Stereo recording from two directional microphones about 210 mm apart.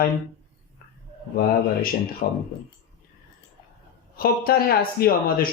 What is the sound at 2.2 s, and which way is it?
Speech, 45° left (ahead or behind).